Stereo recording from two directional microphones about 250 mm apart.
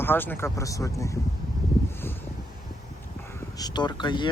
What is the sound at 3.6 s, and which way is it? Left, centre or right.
Speech, centre.